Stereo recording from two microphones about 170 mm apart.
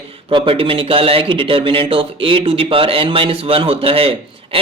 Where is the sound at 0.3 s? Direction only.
30° right (ahead or behind).